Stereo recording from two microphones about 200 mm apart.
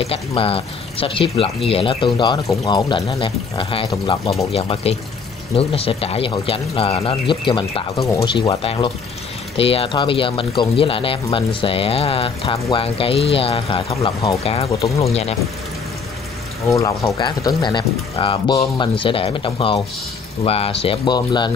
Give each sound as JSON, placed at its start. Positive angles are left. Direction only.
{"t": 0.0, "sound": "speech", "side_deg": 30}
{"t": 14.7, "sound": "speech", "side_deg": 15}
{"t": 16.6, "sound": "speech", "side_deg": 15}